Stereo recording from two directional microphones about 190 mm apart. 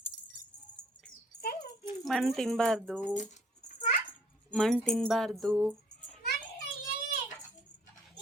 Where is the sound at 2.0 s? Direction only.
Centre (ahead or behind).